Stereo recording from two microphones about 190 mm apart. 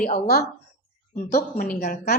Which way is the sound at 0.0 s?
50° left (ahead or behind).